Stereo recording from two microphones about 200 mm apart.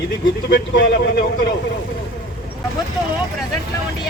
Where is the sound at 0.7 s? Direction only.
60° left (ahead or behind).